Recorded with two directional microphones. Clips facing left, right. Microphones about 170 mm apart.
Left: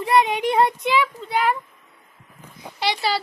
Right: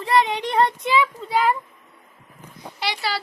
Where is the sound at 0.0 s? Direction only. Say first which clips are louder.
Left 2 dB; 15° left (ahead or behind).